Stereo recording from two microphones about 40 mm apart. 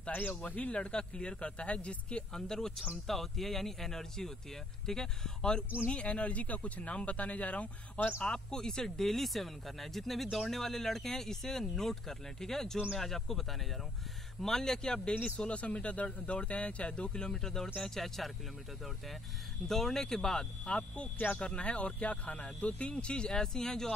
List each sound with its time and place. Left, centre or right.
0.1 s speech: left
0.4 s speech: left
2.3 s speech: centre
5.9 s speech: left
8.2 s speech: centre
15.2 s speech: left; by 18.3 s centre
19.7 s speech: centre